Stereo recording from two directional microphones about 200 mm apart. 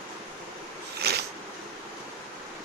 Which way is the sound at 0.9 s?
55° right (ahead or behind).